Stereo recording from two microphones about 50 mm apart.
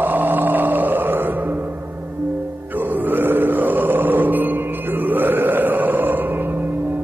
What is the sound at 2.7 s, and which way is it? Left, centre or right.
Grunt, right.